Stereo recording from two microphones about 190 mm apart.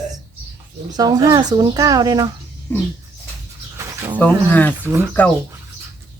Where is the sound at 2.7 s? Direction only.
10° left (ahead or behind).